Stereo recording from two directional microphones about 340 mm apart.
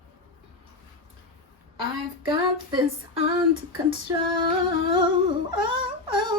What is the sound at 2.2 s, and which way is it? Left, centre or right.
Speech, centre.